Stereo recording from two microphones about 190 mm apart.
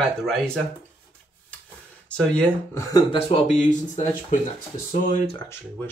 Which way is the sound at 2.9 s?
25° left (ahead or behind).